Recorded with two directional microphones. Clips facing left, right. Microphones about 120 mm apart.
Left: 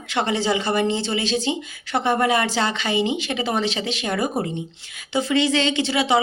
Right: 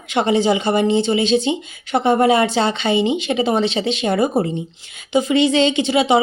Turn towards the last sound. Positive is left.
turn(degrees=-20)  # may be behind; listen again after turning